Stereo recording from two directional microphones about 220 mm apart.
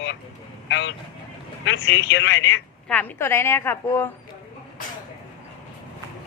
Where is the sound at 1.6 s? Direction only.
55° left (ahead or behind).